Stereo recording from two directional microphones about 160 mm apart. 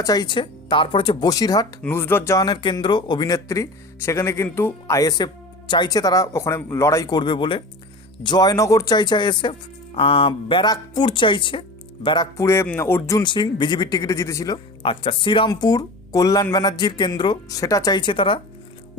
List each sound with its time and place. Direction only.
0.0 s a man's voice: 25° left (ahead or behind)
2.4 s a man's voice: 30° left (ahead or behind)